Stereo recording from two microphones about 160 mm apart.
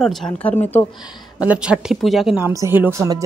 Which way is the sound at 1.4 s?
5° right (ahead or behind).